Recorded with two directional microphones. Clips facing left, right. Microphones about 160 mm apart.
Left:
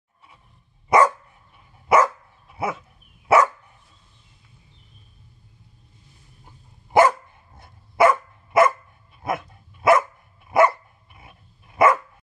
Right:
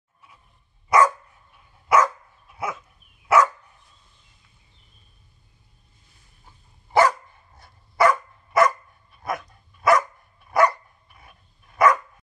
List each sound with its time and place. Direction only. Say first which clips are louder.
0.8 s dog: left 1 dB; 25° left (ahead or behind)
2.4 s dog: left 3 dB; 25° left (ahead or behind)
6.4 s dog: left 2 dB; 20° left (ahead or behind)